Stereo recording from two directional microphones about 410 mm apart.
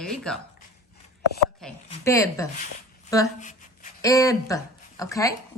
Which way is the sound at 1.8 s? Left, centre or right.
Centre.